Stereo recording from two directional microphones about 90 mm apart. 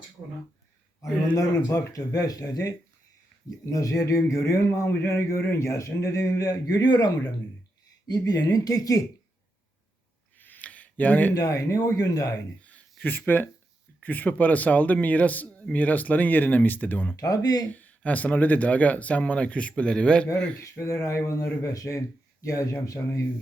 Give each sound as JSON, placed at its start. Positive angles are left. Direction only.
{"t": 1.0, "sound": "a man's voice", "side_deg": 40}
{"t": 6.8, "sound": "speech", "side_deg": 50}
{"t": 10.3, "sound": "a sound", "side_deg": 20}
{"t": 11.3, "sound": "a man's voice", "side_deg": 40}
{"t": 12.6, "sound": "a sound", "side_deg": 15}
{"t": 14.0, "sound": "a man's voice", "side_deg": 20}
{"t": 17.2, "sound": "speech", "side_deg": 40}
{"t": 17.7, "sound": "speech", "side_deg": 20}
{"t": 20.6, "sound": "a man's voice", "side_deg": 30}